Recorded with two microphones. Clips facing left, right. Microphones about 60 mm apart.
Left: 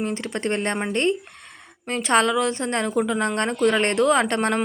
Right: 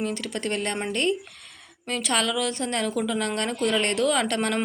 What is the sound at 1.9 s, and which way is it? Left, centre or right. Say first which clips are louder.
A woman's voice: left 6 dB; left.